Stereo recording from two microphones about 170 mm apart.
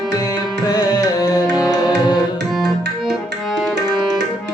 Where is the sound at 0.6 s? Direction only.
20° left (ahead or behind).